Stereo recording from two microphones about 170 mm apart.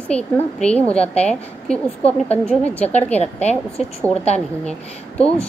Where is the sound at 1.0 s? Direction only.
40° left (ahead or behind).